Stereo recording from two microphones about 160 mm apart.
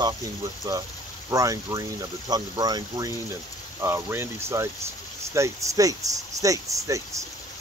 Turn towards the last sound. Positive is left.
turn(degrees=-20)  # may be behind; listen again after turning